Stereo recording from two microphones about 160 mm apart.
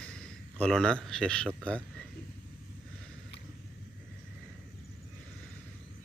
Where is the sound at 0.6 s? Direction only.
5° left (ahead or behind).